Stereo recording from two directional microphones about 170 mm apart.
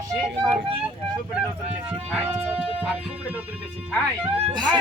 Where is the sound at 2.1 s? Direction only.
10° right (ahead or behind).